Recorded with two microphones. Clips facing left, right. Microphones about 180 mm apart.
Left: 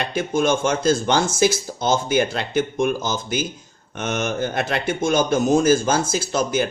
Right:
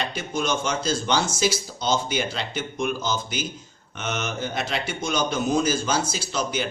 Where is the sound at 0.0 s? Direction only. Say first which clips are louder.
Left 7 dB; 50° left (ahead or behind).